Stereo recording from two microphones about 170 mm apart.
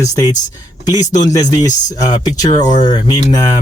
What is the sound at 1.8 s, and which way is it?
Speech, 20° left (ahead or behind).